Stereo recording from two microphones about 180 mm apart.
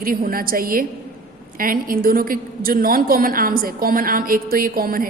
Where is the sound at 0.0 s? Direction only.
55° right (ahead or behind).